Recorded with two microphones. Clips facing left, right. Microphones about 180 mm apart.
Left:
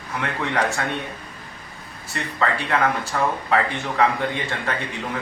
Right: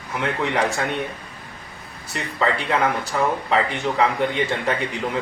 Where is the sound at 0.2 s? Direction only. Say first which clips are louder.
Right 2 dB; 20° right (ahead or behind).